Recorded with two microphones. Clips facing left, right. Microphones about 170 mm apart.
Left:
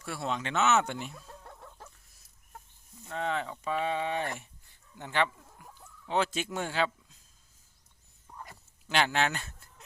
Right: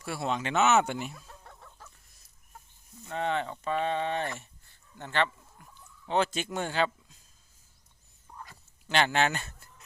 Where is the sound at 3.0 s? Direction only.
Centre (ahead or behind).